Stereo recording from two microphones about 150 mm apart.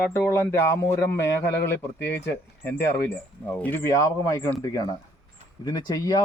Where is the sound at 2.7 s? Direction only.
90° left.